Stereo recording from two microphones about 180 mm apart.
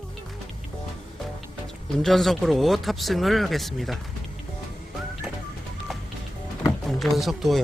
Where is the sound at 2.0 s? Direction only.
Centre (ahead or behind).